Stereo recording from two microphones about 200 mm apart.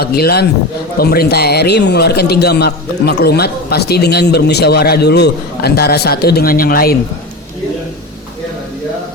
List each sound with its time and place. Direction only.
0.0 s a man's voice: 50° left (ahead or behind)